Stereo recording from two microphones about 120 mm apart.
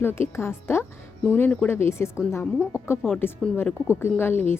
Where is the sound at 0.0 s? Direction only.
20° left (ahead or behind).